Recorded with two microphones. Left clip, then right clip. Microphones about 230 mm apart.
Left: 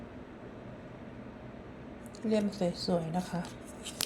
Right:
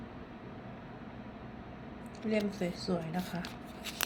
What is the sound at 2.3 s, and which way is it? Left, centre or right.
Speech, centre.